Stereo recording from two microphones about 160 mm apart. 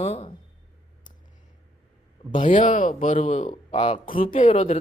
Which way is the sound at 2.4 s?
55° left (ahead or behind).